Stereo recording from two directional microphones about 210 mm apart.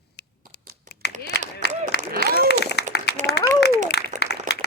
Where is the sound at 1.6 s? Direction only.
55° left (ahead or behind).